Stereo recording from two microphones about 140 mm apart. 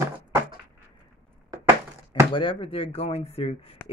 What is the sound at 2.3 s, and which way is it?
Speech, 40° left (ahead or behind).